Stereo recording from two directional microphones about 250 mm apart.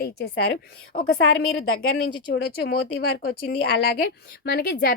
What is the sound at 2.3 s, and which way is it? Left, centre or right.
A woman's voice, left.